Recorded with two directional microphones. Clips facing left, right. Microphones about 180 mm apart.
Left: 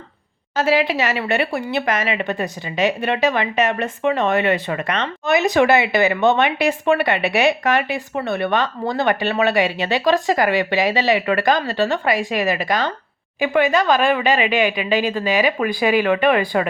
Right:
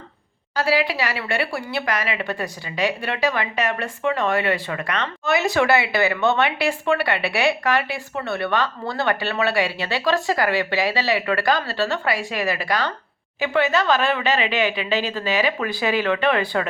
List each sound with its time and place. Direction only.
0.5 s a woman's voice: 20° left (ahead or behind)